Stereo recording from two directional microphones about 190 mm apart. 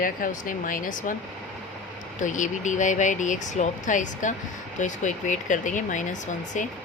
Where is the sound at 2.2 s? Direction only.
40° left (ahead or behind).